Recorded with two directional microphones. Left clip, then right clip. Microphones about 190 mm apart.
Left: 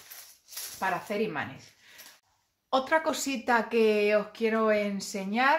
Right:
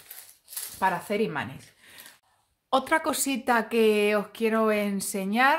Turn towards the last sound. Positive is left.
turn(degrees=-45)  # may be behind; listen again after turning